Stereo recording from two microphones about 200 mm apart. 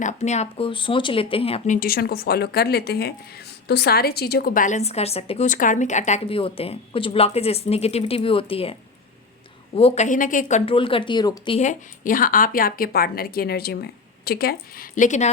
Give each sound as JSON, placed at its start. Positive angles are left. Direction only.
{"t": 0.0, "sound": "speech", "side_deg": 35}
{"t": 9.7, "sound": "speech", "side_deg": 30}
{"t": 10.7, "sound": "speech", "side_deg": 25}
{"t": 11.6, "sound": "a woman's voice", "side_deg": 40}